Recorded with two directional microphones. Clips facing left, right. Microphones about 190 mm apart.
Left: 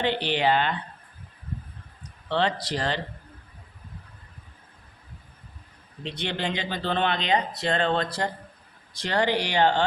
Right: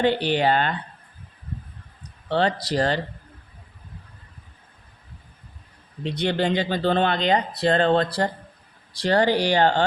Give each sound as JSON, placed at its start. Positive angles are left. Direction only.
{"t": 0.0, "sound": "speech", "side_deg": -45}
{"t": 2.3, "sound": "speech", "side_deg": -40}
{"t": 6.0, "sound": "speech", "side_deg": -45}